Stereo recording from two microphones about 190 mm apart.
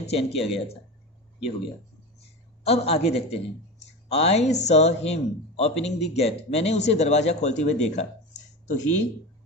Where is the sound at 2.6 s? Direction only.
35° left (ahead or behind).